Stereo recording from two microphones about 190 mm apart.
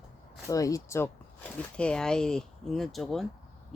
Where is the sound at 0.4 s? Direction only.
15° left (ahead or behind).